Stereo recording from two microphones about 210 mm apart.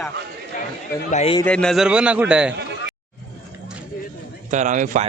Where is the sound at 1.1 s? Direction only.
30° left (ahead or behind).